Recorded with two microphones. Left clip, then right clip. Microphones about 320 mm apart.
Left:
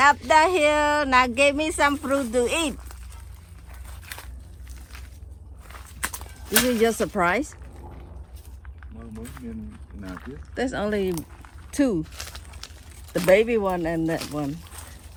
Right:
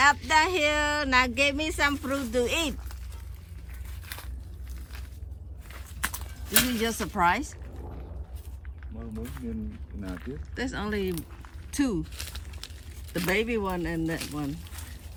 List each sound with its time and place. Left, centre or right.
0.0 s speech: centre
6.0 s horse: centre
6.5 s speech: centre
6.7 s speech: centre
10.5 s speech: centre
11.4 s a sound: centre
12.0 s a sound: centre
13.2 s speech: centre
14.2 s speech: centre